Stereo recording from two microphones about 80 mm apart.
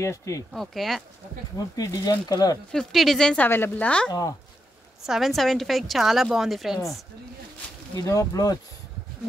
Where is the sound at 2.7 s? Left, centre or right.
Centre.